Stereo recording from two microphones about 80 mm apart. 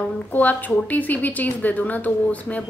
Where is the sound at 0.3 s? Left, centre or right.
Left.